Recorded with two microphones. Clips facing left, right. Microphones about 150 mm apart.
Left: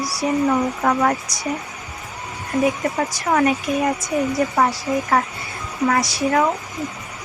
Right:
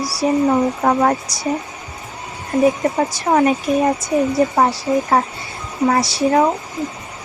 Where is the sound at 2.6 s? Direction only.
30° right (ahead or behind).